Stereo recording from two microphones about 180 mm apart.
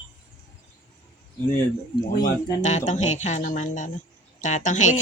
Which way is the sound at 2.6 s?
40° left (ahead or behind).